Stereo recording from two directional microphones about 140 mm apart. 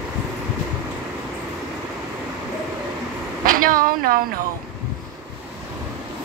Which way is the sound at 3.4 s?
85° right.